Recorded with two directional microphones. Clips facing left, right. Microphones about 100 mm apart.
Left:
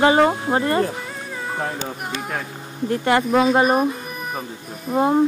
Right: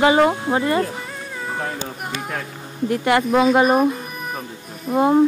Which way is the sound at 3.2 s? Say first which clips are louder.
Right 2 dB; centre (ahead or behind).